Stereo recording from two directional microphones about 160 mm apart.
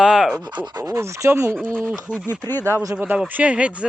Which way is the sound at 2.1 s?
15° left (ahead or behind).